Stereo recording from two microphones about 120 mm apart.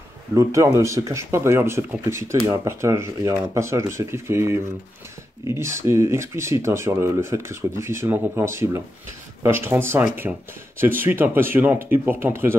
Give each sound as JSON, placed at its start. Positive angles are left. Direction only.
{"t": 0.3, "sound": "speech", "side_deg": -25}